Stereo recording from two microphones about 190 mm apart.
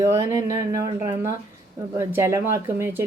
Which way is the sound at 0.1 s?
15° right (ahead or behind).